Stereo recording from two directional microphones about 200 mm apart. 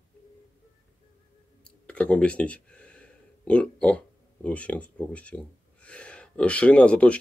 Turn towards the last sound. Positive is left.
turn(degrees=5)  # may be behind; listen again after turning